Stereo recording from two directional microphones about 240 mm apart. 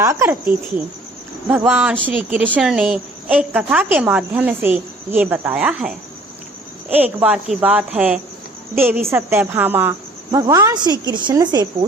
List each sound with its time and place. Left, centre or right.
0.0 s a woman's voice: centre
6.9 s a woman's voice: centre